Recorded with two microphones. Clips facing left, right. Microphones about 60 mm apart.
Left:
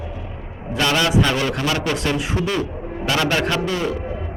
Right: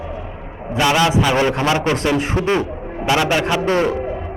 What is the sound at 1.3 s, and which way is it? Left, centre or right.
A man's voice, right.